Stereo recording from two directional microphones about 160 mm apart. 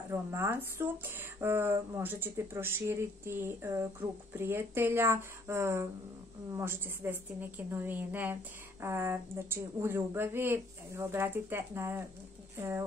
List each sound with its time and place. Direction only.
0.1 s speech: 15° right (ahead or behind)